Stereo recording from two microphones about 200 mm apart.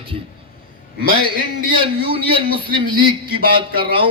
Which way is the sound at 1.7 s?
25° right (ahead or behind).